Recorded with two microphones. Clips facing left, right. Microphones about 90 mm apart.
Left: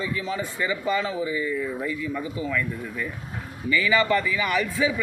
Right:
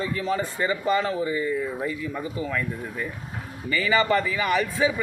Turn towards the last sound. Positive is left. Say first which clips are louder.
# right 1 dB
turn(degrees=-35)  # may be behind; listen again after turning